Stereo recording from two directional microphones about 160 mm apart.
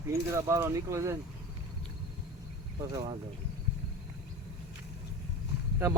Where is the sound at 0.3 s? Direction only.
15° right (ahead or behind).